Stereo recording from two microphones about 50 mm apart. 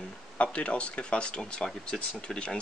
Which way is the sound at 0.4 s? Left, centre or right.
Left.